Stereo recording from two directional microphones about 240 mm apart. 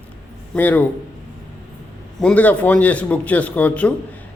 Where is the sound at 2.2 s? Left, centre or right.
Centre.